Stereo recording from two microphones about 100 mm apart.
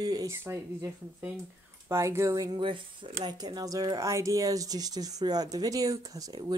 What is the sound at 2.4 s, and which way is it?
Speech, 50° right (ahead or behind).